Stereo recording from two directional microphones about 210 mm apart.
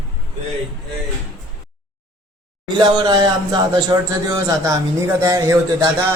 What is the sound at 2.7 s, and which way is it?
Speech, 20° right (ahead or behind).